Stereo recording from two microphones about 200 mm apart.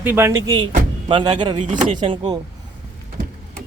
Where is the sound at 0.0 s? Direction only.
10° right (ahead or behind).